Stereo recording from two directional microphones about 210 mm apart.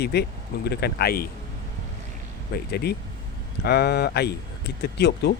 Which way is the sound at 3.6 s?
50° left (ahead or behind).